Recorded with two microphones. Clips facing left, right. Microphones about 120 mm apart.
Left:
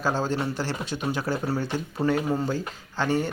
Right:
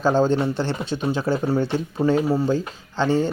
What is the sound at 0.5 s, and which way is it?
Speech, 25° right (ahead or behind).